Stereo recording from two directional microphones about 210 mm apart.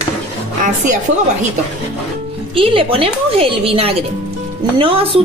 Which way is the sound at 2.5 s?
25° right (ahead or behind).